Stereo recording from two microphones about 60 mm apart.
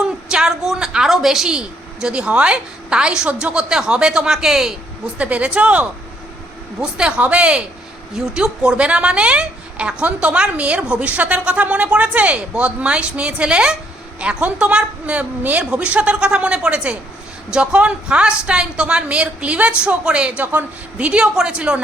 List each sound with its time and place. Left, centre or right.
0.0 s a sound: centre
3.4 s a woman's voice: centre
5.1 s a woman's voice: right
6.8 s a woman's voice: centre